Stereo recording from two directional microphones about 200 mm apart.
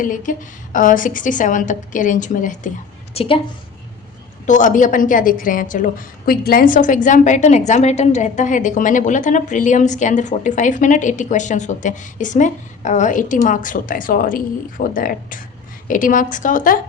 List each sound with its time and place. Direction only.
0.0 s a woman's voice: 40° left (ahead or behind)
3.2 s a woman's voice: 25° left (ahead or behind)
4.4 s a woman's voice: 40° left (ahead or behind)